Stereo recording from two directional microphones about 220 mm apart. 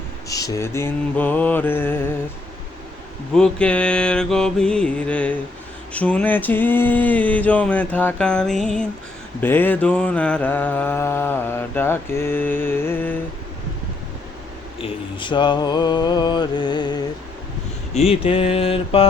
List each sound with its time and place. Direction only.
0.3 s mantra: 15° left (ahead or behind)
3.3 s mantra: 5° left (ahead or behind)
14.8 s a sound: 25° left (ahead or behind)